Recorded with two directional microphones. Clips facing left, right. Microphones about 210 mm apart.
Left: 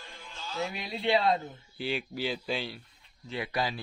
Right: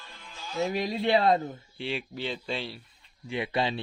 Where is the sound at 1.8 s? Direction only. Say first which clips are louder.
Left 1 dB; centre (ahead or behind).